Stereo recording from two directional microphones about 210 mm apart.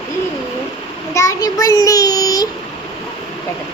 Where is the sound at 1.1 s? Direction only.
15° left (ahead or behind).